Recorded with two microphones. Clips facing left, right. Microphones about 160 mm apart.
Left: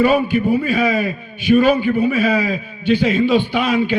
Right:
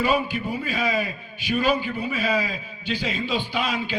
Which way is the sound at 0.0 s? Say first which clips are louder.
Left 9 dB; 55° left (ahead or behind).